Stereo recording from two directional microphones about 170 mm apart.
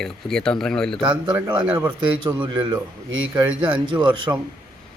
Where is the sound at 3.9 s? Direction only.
30° right (ahead or behind).